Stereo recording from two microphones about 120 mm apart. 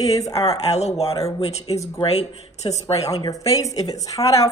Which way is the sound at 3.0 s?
30° left (ahead or behind).